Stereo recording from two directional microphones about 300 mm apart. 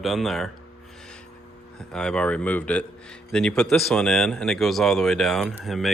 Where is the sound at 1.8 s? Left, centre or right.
Centre.